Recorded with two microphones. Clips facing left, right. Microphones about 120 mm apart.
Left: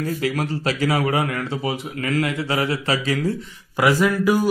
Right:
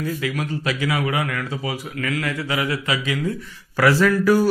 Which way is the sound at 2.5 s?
35° left (ahead or behind).